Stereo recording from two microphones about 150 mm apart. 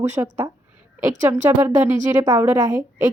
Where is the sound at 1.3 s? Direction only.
15° right (ahead or behind).